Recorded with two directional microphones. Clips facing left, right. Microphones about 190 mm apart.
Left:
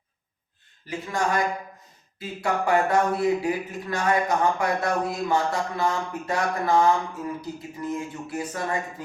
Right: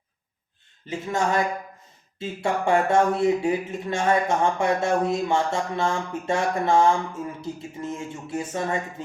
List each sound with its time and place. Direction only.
0.9 s speech: 25° right (ahead or behind)